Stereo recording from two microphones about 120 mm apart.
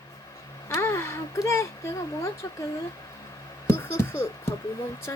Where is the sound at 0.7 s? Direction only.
20° left (ahead or behind).